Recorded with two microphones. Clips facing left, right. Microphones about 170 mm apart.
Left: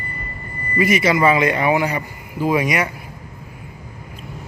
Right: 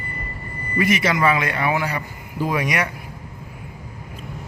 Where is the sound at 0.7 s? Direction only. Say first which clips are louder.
Left 3 dB; 10° left (ahead or behind).